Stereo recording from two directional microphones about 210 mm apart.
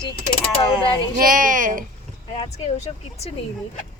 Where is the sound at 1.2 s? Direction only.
40° right (ahead or behind).